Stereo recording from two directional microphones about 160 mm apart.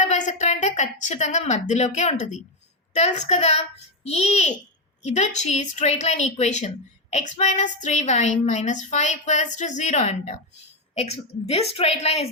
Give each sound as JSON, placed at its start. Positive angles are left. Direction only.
{"t": 0.0, "sound": "a woman's voice", "side_deg": 45}